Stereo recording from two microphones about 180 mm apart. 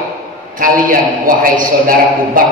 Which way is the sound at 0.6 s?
50° right (ahead or behind).